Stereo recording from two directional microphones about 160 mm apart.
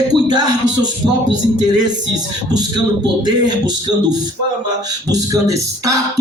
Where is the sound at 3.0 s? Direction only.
25° right (ahead or behind).